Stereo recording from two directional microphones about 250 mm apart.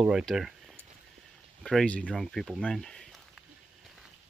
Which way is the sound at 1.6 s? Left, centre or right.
Centre.